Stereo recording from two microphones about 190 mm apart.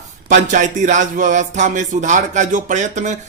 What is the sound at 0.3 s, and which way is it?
Music, 40° right (ahead or behind).